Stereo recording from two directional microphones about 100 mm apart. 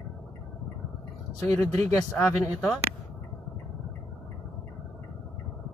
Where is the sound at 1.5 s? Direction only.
25° left (ahead or behind).